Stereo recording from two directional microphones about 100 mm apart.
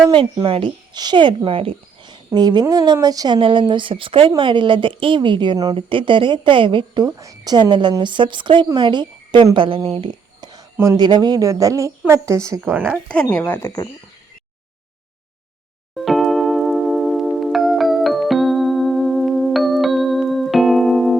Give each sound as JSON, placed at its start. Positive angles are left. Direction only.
{"t": 0.4, "sound": "a woman's voice", "side_deg": -55}
{"t": 1.5, "sound": "speech", "side_deg": -65}
{"t": 2.0, "sound": "a woman's voice", "side_deg": -45}
{"t": 5.7, "sound": "speech", "side_deg": -60}
{"t": 7.0, "sound": "a woman's voice", "side_deg": -35}
{"t": 9.6, "sound": "speech", "side_deg": -60}
{"t": 10.1, "sound": "a sound", "side_deg": -45}
{"t": 10.9, "sound": "a woman's voice", "side_deg": -45}
{"t": 12.6, "sound": "speech", "side_deg": -15}
{"t": 13.2, "sound": "speech", "side_deg": 20}
{"t": 16.0, "sound": "glockenspiel", "side_deg": 0}